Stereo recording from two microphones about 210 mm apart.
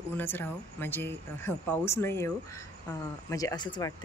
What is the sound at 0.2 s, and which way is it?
Speech, 10° left (ahead or behind).